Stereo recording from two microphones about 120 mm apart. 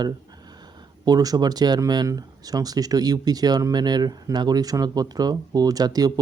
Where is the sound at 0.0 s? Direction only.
35° right (ahead or behind).